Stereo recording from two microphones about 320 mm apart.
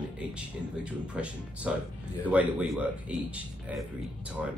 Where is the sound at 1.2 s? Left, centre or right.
Centre.